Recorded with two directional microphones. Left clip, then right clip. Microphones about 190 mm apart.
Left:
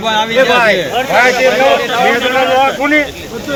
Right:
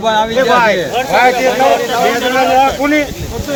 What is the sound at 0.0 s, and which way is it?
Speech, 60° right (ahead or behind).